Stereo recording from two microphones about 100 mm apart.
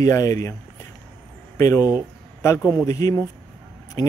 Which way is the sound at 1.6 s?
35° left (ahead or behind).